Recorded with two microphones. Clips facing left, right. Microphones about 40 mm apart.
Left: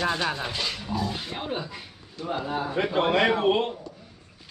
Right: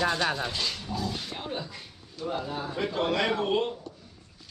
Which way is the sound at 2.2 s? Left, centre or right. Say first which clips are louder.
Left 3 dB; left.